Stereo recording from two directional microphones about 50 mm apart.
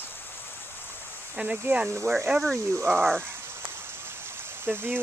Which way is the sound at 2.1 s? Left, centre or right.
Right.